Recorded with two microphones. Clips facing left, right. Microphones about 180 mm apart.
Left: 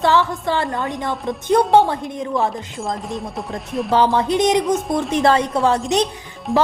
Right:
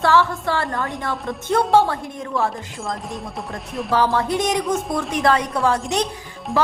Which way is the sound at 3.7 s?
Centre (ahead or behind).